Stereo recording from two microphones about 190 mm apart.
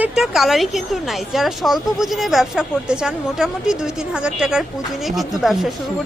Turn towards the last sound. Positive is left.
turn(degrees=0)  # may be behind; listen again after turning